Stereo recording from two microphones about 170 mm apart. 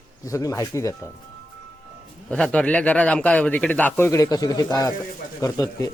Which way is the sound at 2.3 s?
5° left (ahead or behind).